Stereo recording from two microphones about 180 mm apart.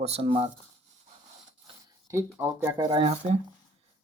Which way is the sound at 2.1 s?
15° right (ahead or behind).